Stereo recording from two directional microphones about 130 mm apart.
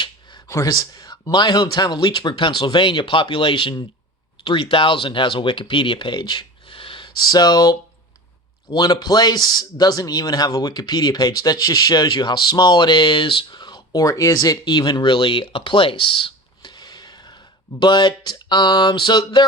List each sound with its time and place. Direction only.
0.4 s speech: 25° left (ahead or behind)